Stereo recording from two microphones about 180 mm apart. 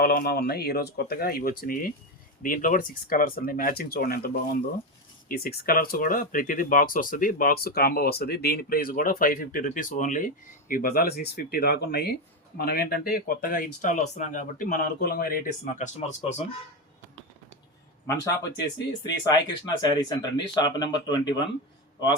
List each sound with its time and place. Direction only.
0.0 s speech: 55° left (ahead or behind)
15.6 s speech: 40° left (ahead or behind)
19.2 s speech: 20° left (ahead or behind)